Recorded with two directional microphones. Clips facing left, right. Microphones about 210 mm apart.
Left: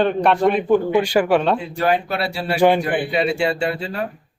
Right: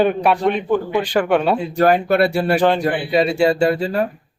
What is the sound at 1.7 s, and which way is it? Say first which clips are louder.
Speech: right 5 dB; 45° right (ahead or behind).